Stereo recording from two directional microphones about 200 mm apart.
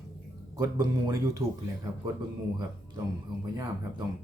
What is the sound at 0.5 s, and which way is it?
A man's voice, 20° right (ahead or behind).